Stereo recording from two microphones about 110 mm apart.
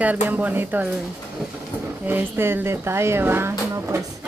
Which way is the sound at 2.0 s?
20° right (ahead or behind).